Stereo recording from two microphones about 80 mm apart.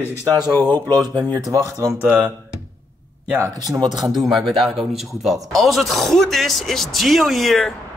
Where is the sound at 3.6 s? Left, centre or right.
Right.